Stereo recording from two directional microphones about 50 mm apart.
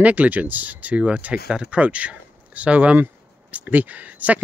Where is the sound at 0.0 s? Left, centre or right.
Right.